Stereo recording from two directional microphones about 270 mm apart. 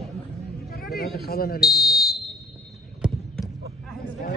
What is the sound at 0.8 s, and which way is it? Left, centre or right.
Speech, left.